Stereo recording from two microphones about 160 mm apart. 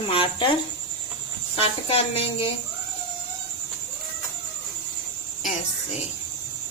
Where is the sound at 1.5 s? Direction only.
35° left (ahead or behind).